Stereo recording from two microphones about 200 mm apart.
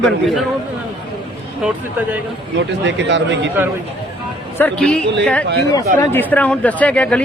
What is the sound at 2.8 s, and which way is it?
Speech, 65° right (ahead or behind).